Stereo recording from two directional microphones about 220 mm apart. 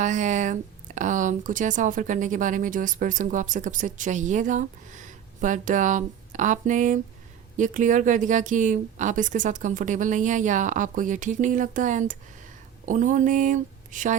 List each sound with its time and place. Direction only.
0.0 s speech: 35° right (ahead or behind)